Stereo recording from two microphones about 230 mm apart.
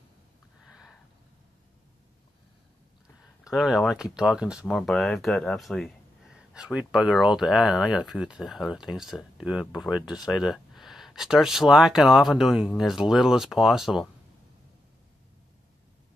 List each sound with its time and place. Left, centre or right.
3.5 s speech: centre